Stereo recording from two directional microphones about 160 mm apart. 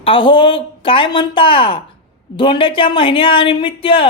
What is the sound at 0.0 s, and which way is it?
Speech, 35° left (ahead or behind).